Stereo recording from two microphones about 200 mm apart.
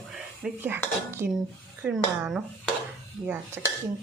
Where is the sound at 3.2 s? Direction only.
10° right (ahead or behind).